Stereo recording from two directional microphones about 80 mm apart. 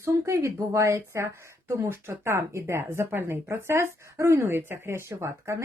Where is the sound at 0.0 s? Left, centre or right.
Right.